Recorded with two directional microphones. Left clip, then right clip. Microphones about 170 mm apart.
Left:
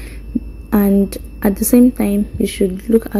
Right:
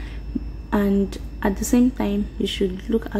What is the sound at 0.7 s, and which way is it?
A woman's voice, 30° left (ahead or behind).